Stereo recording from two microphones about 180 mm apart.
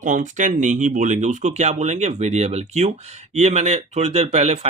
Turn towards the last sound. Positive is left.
turn(degrees=-35)  # may be behind; listen again after turning